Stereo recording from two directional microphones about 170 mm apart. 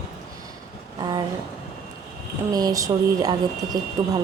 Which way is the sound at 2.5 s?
20° right (ahead or behind).